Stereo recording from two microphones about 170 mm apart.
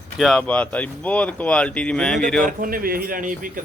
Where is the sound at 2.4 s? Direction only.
55° right (ahead or behind).